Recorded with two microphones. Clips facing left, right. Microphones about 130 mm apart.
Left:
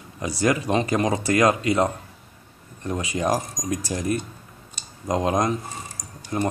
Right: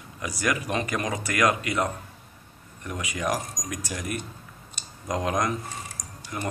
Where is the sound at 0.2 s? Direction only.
30° left (ahead or behind).